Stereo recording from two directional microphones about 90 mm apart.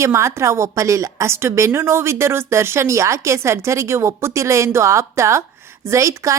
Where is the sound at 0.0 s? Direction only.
30° right (ahead or behind).